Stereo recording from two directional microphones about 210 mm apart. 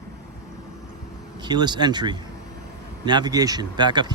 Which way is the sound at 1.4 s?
20° right (ahead or behind).